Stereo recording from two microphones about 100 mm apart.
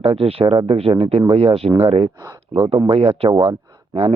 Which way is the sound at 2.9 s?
75° right (ahead or behind).